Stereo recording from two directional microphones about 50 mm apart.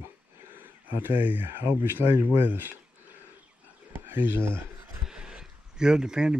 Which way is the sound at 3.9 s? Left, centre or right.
Right.